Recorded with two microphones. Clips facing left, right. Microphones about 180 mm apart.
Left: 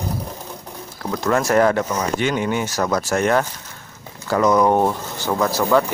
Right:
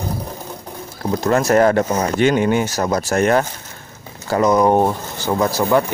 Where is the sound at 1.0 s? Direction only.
25° right (ahead or behind).